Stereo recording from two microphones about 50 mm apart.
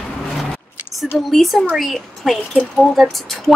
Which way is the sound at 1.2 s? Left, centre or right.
Centre.